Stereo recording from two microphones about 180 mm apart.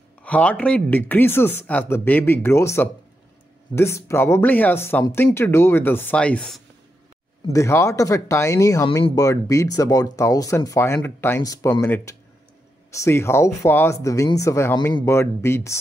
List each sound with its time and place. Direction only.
0.2 s speech: 5° left (ahead or behind)